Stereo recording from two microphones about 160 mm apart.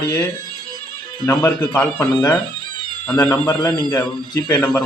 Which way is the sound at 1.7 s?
15° left (ahead or behind).